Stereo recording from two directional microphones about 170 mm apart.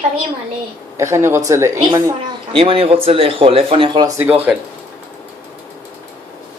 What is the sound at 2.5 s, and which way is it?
Speech, 35° right (ahead or behind).